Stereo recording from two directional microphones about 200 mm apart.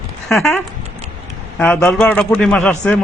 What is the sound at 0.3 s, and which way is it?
A man's voice, centre (ahead or behind).